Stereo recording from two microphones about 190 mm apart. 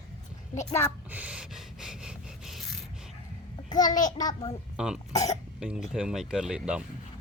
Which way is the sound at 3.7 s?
20° left (ahead or behind).